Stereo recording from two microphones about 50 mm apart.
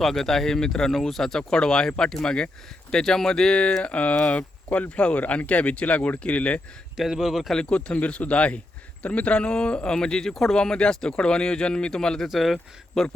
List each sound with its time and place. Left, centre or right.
0.0 s speech: centre
3.8 s speech: left
6.9 s speech: centre
7.5 s speech: left
12.3 s speech: centre